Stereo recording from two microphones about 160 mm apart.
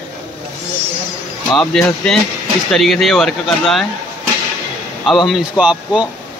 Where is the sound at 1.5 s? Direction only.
5° left (ahead or behind).